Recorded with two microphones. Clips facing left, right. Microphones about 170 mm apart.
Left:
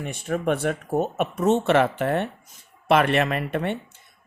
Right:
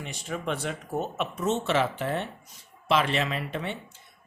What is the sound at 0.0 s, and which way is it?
Speech, 55° left (ahead or behind).